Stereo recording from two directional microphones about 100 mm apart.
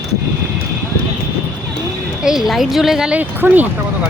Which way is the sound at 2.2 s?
5° right (ahead or behind).